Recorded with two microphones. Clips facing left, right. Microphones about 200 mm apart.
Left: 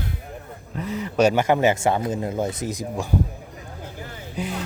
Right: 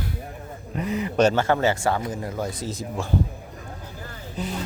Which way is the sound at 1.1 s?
10° left (ahead or behind).